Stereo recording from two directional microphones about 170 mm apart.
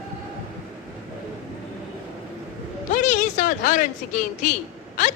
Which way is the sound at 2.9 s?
50° left (ahead or behind).